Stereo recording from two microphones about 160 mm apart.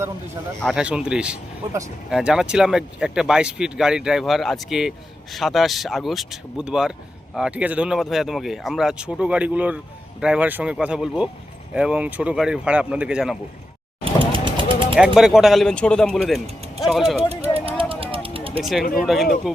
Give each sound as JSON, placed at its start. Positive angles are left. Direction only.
{"t": 0.6, "sound": "speech", "side_deg": -5}
{"t": 14.0, "sound": "vehicle", "side_deg": -30}
{"t": 14.9, "sound": "speech", "side_deg": -5}
{"t": 17.2, "sound": "a sound", "side_deg": -40}
{"t": 18.6, "sound": "speech", "side_deg": 0}